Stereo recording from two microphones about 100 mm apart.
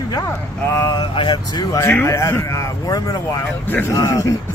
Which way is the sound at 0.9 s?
55° left (ahead or behind).